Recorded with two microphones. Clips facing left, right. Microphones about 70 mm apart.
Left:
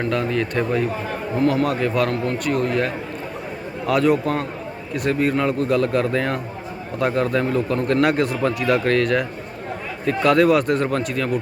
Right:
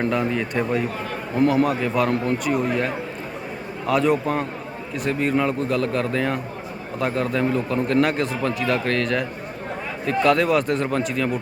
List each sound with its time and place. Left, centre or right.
0.0 s speech: centre
1.4 s a man's voice: right
1.6 s a man's voice: centre